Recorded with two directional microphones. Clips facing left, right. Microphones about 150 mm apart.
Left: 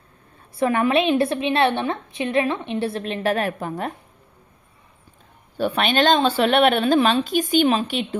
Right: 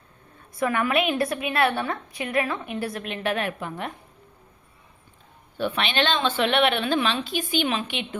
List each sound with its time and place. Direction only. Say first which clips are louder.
0.5 s a woman's voice: left 4 dB; 30° left (ahead or behind)
5.5 s speech: left 5 dB; 40° left (ahead or behind)